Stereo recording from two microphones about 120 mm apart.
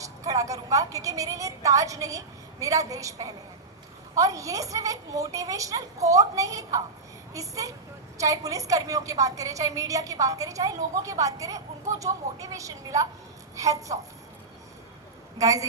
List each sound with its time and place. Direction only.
0.0 s a woman's voice: 30° right (ahead or behind)
15.4 s a woman's voice: 30° right (ahead or behind)